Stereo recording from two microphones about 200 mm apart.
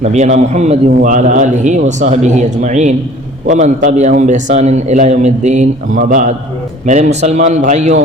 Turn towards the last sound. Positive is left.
turn(degrees=-35)  # may be behind; listen again after turning